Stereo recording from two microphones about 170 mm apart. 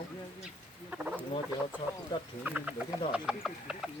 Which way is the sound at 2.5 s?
10° right (ahead or behind).